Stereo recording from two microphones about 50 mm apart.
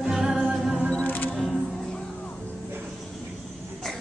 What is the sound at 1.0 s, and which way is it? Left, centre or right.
Music, left.